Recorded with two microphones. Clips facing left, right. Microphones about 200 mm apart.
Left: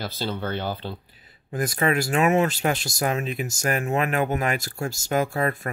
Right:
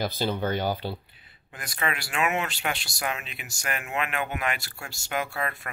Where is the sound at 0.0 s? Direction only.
15° right (ahead or behind).